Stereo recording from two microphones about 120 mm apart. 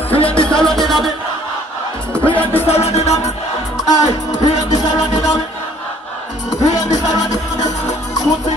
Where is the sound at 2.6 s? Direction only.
60° left (ahead or behind).